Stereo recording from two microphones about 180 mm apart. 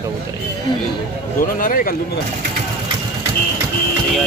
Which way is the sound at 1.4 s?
50° left (ahead or behind).